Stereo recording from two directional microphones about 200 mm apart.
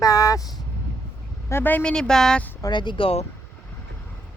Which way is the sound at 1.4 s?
10° left (ahead or behind).